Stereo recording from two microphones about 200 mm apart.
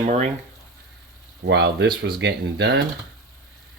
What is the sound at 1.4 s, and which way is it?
Speech, 60° right (ahead or behind).